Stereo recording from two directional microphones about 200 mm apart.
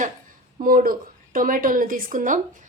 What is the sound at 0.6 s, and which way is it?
A woman's voice, 45° right (ahead or behind).